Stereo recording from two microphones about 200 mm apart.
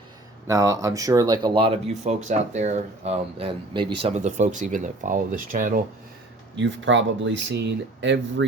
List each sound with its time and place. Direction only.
0.4 s speech: 15° right (ahead or behind); by 5.8 s 40° right (ahead or behind)
6.6 s speech: 65° right (ahead or behind)